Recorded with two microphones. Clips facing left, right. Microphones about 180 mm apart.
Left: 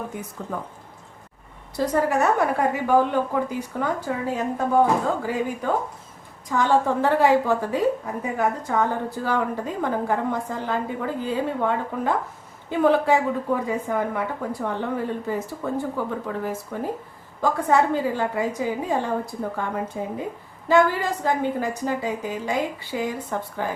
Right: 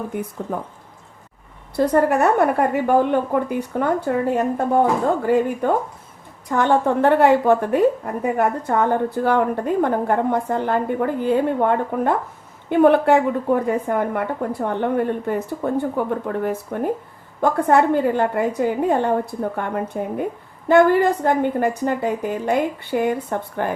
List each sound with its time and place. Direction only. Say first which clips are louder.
1.7 s a woman's voice: right 5 dB; 60° right (ahead or behind)